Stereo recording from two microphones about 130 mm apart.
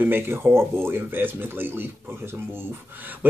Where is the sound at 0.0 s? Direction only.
15° right (ahead or behind).